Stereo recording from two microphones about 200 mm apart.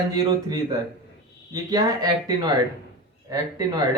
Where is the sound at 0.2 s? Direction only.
20° right (ahead or behind).